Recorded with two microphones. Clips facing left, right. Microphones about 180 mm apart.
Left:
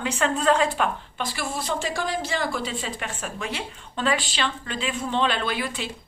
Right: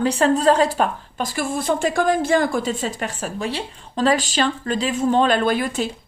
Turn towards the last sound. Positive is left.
turn(degrees=-45)  # may be behind; listen again after turning